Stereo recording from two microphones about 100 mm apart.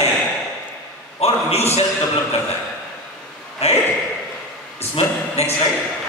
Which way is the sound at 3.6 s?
90° left.